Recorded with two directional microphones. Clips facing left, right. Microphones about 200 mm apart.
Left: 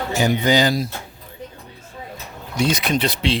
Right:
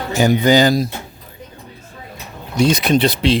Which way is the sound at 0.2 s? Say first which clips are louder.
Right 5 dB; 45° right (ahead or behind).